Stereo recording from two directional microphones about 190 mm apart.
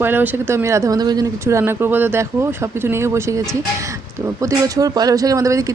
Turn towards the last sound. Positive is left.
turn(degrees=-15)  # may be behind; listen again after turning